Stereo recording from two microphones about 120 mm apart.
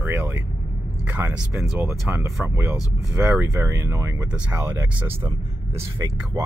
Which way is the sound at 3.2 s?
10° right (ahead or behind).